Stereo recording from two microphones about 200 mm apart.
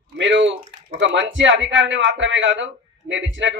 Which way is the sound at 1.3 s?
65° right (ahead or behind).